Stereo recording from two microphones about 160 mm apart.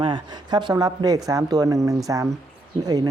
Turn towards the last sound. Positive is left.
turn(degrees=-25)  # may be behind; listen again after turning